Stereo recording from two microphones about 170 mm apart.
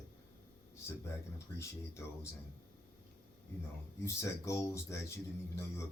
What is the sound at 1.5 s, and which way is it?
Speech, 15° left (ahead or behind).